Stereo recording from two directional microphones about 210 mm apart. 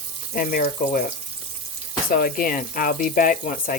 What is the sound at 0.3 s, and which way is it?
Speech, 45° left (ahead or behind).